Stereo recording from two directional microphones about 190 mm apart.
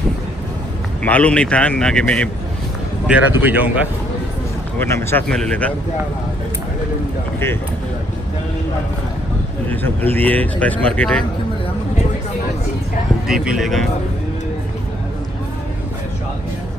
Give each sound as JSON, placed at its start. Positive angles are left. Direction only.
{"t": 1.0, "sound": "speech", "side_deg": 5}
{"t": 3.1, "sound": "a man's voice", "side_deg": -10}
{"t": 4.7, "sound": "speech", "side_deg": 10}
{"t": 10.1, "sound": "speech", "side_deg": 10}
{"t": 13.3, "sound": "speech", "side_deg": -5}